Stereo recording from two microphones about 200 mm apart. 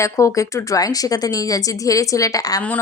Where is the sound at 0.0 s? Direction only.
15° left (ahead or behind).